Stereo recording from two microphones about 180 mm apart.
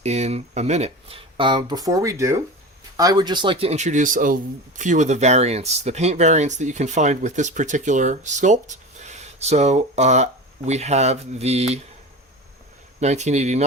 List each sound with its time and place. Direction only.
0.0 s speech: 40° right (ahead or behind)
13.0 s speech: 40° right (ahead or behind)